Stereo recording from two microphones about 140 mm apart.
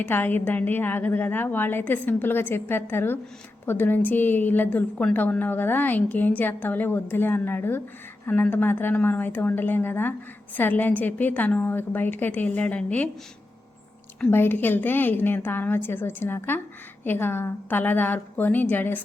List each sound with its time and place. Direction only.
0.0 s a woman's voice: 15° left (ahead or behind)
14.2 s a woman's voice: 15° left (ahead or behind)